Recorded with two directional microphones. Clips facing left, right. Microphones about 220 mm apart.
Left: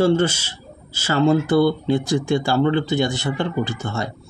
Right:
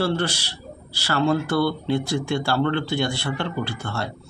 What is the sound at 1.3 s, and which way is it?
Speech, 20° left (ahead or behind).